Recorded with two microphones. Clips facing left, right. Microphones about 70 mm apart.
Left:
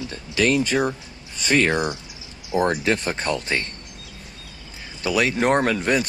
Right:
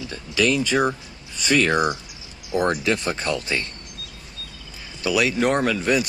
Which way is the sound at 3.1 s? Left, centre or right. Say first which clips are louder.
Left 1 dB; left.